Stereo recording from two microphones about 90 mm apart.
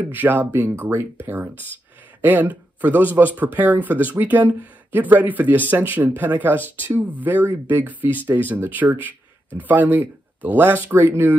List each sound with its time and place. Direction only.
0.1 s speech: 20° right (ahead or behind)